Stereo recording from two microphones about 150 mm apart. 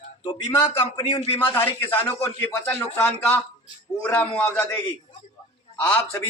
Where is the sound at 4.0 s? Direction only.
10° left (ahead or behind).